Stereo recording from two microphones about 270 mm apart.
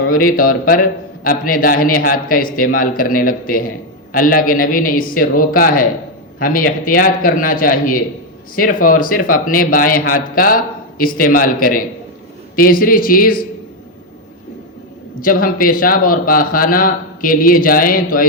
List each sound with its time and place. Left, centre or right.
0.0 s a man's voice: left
15.2 s a man's voice: left